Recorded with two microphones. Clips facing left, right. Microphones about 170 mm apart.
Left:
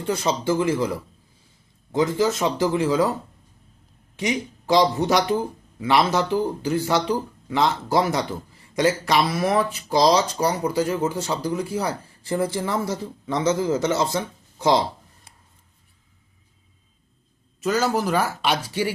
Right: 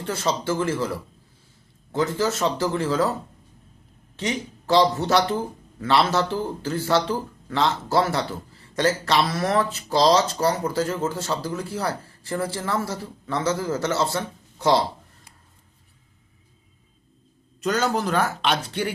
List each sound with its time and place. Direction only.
0.0 s speech: 15° left (ahead or behind)
4.2 s speech: 15° left (ahead or behind)
17.6 s speech: 5° left (ahead or behind)